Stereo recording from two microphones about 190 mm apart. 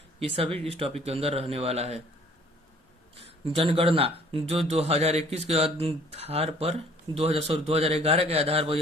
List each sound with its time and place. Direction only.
0.2 s speech: 30° right (ahead or behind)
3.2 s speech: 30° right (ahead or behind)